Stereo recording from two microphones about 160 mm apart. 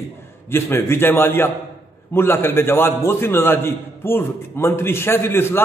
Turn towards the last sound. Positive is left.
turn(degrees=15)  # may be behind; listen again after turning